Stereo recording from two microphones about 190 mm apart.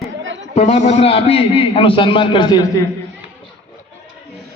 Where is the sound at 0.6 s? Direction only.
35° left (ahead or behind).